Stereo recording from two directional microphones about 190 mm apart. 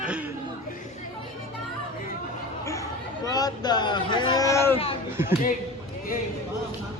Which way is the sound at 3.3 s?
20° left (ahead or behind).